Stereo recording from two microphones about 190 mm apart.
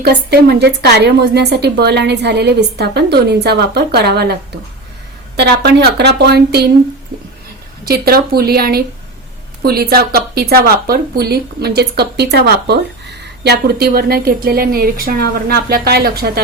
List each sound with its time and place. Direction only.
0.0 s speech: 55° right (ahead or behind)
5.4 s speech: 60° right (ahead or behind)
7.9 s speech: 55° right (ahead or behind)